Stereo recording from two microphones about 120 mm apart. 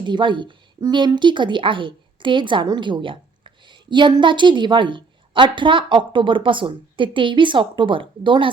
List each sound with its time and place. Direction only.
0.0 s speech: 40° right (ahead or behind)